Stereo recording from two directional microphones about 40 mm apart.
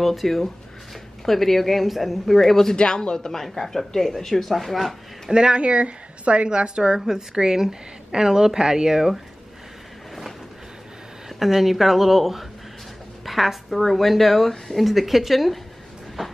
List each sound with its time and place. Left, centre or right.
0.0 s speech: centre
2.7 s speech: centre
5.3 s a woman's voice: right
11.2 s speech: centre
16.2 s a sound: centre